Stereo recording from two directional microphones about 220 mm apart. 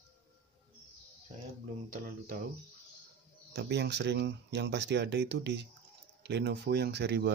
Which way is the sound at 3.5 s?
50° right (ahead or behind).